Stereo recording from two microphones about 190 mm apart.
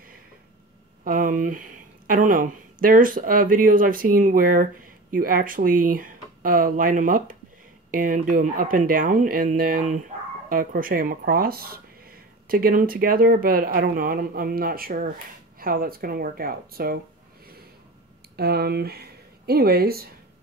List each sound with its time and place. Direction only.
1.0 s speech: 45° right (ahead or behind)
18.3 s speech: 55° right (ahead or behind)